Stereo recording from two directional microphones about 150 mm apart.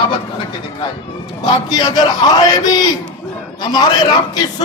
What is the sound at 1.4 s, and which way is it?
Speech, 25° left (ahead or behind).